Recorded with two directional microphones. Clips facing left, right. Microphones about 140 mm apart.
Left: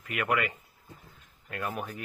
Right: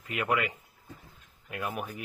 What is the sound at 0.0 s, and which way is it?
Speech, 20° right (ahead or behind).